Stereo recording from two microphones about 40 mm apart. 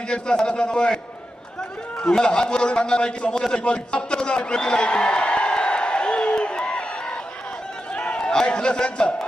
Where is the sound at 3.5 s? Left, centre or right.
Left.